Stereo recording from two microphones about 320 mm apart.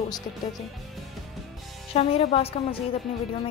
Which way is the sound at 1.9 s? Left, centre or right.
Centre.